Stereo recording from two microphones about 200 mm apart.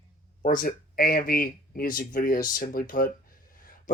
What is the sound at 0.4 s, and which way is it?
Speech, 45° left (ahead or behind).